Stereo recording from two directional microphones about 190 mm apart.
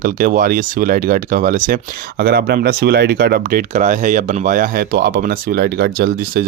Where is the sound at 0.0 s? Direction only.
45° right (ahead or behind).